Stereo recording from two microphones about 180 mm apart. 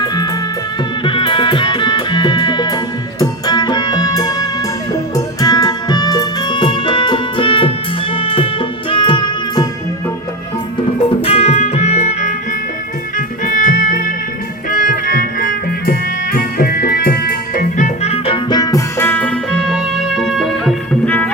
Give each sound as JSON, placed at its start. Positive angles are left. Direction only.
{"t": 0.0, "sound": "music", "side_deg": 20}
{"t": 11.2, "sound": "music", "side_deg": 35}